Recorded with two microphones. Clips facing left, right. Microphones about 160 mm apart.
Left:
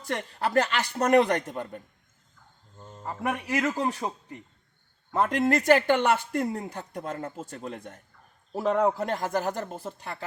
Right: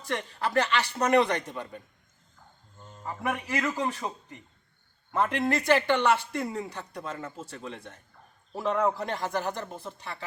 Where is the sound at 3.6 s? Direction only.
10° left (ahead or behind).